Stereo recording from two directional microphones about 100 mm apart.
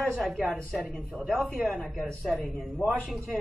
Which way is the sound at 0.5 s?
10° left (ahead or behind).